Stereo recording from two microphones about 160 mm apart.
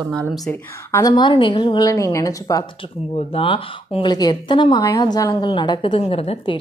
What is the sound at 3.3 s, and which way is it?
Speech, 35° left (ahead or behind).